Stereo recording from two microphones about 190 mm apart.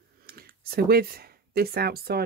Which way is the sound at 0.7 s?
55° right (ahead or behind).